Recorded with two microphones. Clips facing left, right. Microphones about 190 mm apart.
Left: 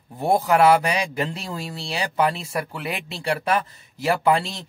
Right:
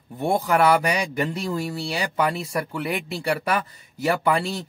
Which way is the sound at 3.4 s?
30° left (ahead or behind).